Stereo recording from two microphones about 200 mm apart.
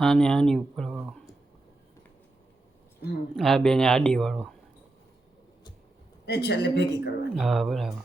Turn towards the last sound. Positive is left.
turn(degrees=0)  # may be behind; listen again after turning